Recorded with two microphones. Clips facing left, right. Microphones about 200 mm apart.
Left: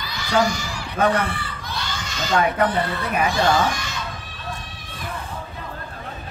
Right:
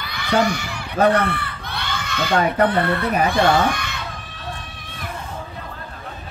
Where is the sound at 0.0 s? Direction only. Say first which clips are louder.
Right 1 dB; 60° right (ahead or behind).